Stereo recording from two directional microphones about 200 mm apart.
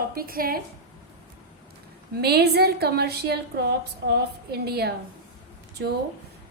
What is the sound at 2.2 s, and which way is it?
A woman's voice, 55° right (ahead or behind).